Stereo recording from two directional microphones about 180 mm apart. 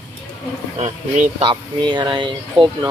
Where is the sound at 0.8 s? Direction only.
40° right (ahead or behind).